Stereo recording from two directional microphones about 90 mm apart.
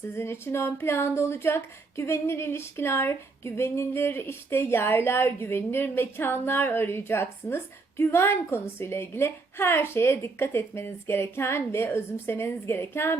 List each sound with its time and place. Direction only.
0.2 s speech: 30° left (ahead or behind)